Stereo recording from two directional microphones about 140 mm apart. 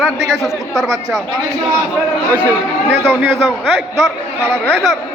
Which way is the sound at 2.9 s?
15° right (ahead or behind).